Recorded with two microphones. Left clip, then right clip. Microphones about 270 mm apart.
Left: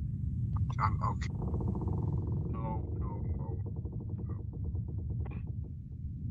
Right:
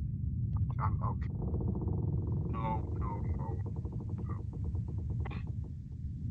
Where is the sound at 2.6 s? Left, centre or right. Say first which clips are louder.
Right 6 dB; right.